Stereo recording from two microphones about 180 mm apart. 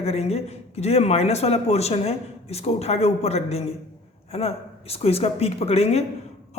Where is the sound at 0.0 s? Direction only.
35° left (ahead or behind).